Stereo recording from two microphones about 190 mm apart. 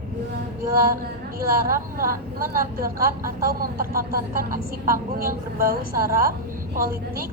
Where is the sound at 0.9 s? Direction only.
50° right (ahead or behind).